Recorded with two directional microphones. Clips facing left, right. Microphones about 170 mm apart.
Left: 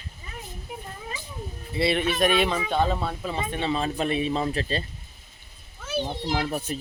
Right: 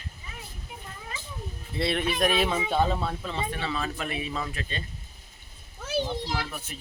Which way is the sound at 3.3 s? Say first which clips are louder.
Left 4 dB; 20° left (ahead or behind).